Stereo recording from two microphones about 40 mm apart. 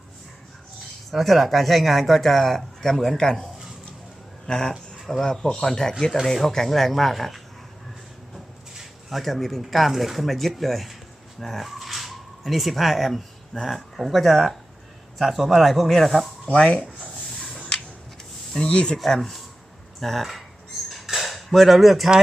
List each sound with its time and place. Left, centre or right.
1.1 s speech: centre; by 4.7 s left
5.0 s speech: centre
8.7 s speech: centre
11.3 s dog: centre
13.6 s speech: centre
16.6 s speech: left
17.6 s a sound: left
18.5 s speech: centre
19.1 s speech: centre
20.9 s a sound: centre